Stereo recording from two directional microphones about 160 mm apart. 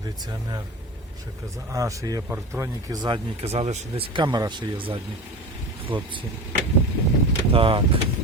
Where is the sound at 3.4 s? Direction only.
45° right (ahead or behind).